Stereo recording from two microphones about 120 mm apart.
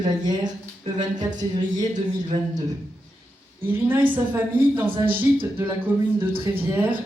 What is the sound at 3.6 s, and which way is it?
Speech, 15° right (ahead or behind).